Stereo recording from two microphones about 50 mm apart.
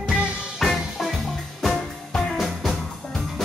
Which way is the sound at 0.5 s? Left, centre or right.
Centre.